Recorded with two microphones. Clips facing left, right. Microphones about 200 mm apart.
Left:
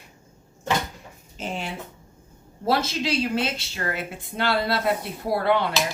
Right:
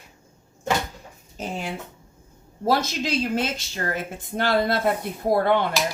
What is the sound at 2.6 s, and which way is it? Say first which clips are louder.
A woman's voice: right 1 dB; 45° right (ahead or behind).